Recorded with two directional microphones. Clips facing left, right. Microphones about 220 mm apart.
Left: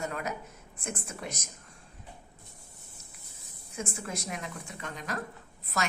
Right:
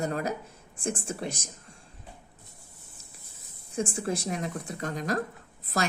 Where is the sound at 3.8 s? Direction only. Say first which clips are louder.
Right 7 dB; 30° right (ahead or behind).